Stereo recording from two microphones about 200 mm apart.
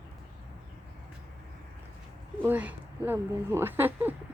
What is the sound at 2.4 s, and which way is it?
Speech, 10° right (ahead or behind).